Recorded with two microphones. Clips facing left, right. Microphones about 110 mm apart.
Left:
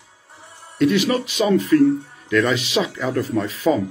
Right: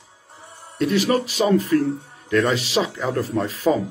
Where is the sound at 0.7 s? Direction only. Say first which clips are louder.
Left 2 dB; 35° right (ahead or behind).